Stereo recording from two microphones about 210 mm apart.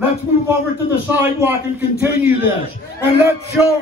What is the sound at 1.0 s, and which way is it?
Speech, 10° right (ahead or behind).